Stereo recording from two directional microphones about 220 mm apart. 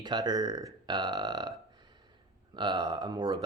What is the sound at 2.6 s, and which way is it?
Speech, 20° right (ahead or behind).